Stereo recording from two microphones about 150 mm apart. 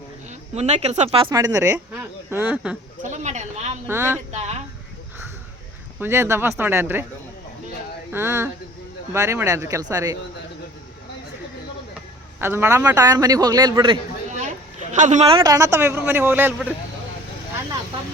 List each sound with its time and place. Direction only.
0.3 s speech: 45° right (ahead or behind)
1.3 s a man's voice: 25° right (ahead or behind)
1.9 s speech: 15° right (ahead or behind)
3.0 s speech: 55° right (ahead or behind)
3.8 s speech: 15° right (ahead or behind)
4.3 s speech: 50° right (ahead or behind)
6.0 s speech: 15° right (ahead or behind)
8.1 s a man's voice: 15° right (ahead or behind)
12.4 s a man's voice: 15° right (ahead or behind)
14.3 s a sound: 55° right (ahead or behind)
14.9 s speech: 55° right (ahead or behind)
15.4 s speech: 25° right (ahead or behind)